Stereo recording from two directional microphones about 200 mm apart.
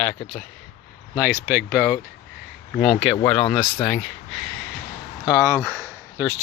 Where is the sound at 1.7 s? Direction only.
5° right (ahead or behind).